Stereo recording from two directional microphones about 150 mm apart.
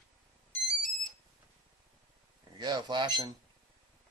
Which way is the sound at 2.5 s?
30° right (ahead or behind).